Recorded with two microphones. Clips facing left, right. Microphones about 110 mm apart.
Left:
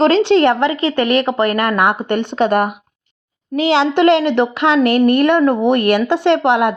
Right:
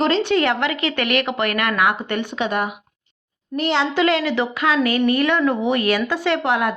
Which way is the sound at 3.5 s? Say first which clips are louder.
Left 6 dB; 90° left.